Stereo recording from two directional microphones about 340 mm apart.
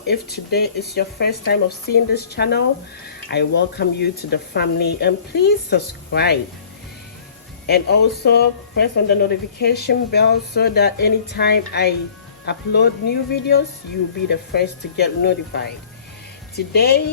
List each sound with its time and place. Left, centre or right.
0.1 s speech: left
7.7 s speech: left
16.7 s speech: left